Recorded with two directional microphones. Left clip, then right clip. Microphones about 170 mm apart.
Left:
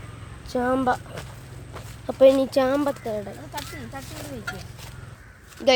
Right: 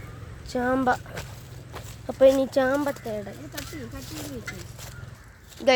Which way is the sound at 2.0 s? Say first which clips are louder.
Left 2 dB; 5° left (ahead or behind).